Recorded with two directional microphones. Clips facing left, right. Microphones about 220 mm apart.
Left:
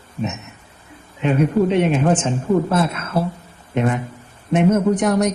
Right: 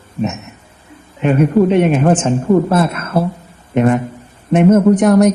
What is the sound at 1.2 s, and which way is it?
Speech, 50° right (ahead or behind).